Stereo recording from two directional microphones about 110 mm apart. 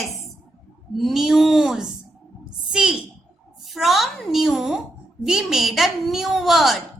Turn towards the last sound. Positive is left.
turn(degrees=0)  # may be behind; listen again after turning